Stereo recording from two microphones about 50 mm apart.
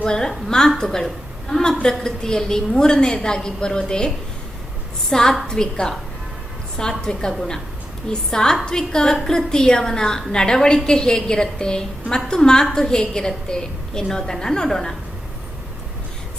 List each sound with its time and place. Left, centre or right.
0.0 s a woman's voice: centre
5.1 s a woman's voice: centre